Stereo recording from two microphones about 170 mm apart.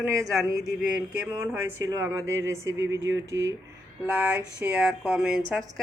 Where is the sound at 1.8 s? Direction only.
20° right (ahead or behind); by 5.8 s 5° left (ahead or behind).